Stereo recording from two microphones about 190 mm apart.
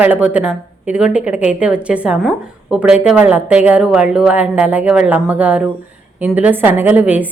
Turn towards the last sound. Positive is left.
turn(degrees=-10)  # may be behind; listen again after turning